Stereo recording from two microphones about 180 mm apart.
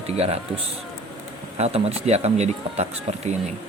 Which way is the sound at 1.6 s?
35° right (ahead or behind).